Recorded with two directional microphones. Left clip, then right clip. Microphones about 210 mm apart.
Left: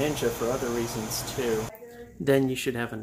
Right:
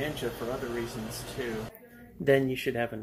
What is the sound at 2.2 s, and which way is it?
Speech, 10° left (ahead or behind).